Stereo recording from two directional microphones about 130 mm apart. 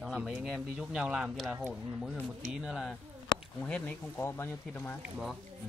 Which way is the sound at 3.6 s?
10° left (ahead or behind).